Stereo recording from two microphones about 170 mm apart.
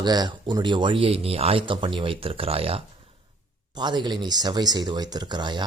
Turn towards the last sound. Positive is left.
turn(degrees=-25)  # may be behind; listen again after turning